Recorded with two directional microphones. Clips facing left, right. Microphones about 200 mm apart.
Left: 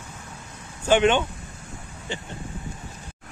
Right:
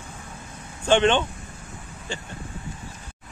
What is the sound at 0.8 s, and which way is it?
Speech, 10° left (ahead or behind).